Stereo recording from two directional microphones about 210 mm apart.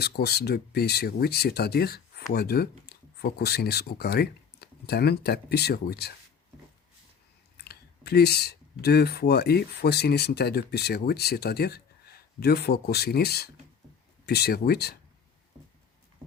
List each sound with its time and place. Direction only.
0.0 s speech: 50° left (ahead or behind)
7.5 s speech: 50° left (ahead or behind)